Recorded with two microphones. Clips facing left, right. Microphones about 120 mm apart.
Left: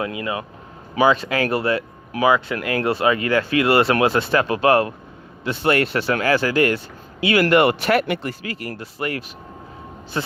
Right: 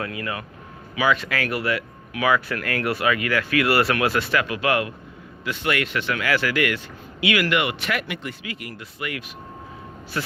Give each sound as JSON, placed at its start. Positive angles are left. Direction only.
{"t": 0.0, "sound": "speech", "side_deg": 20}